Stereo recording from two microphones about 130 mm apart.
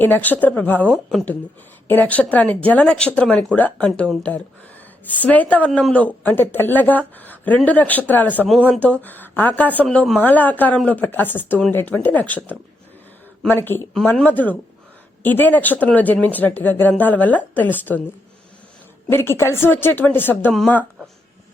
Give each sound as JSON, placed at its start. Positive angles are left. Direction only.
{"t": 0.0, "sound": "a woman's voice", "side_deg": 15}
{"t": 19.0, "sound": "a woman's voice", "side_deg": 20}